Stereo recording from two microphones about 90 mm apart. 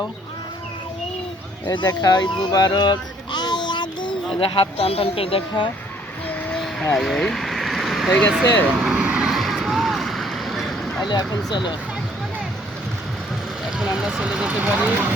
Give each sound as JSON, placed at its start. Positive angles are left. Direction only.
{"t": 1.6, "sound": "speech", "side_deg": 60}
{"t": 4.4, "sound": "speech", "side_deg": 80}
{"t": 6.2, "sound": "vehicle", "side_deg": 20}
{"t": 6.9, "sound": "a sound", "side_deg": 5}
{"t": 8.3, "sound": "vehicle", "side_deg": -5}
{"t": 13.7, "sound": "speech", "side_deg": -5}